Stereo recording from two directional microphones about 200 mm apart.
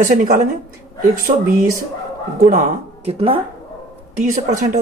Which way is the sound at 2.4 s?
35° right (ahead or behind).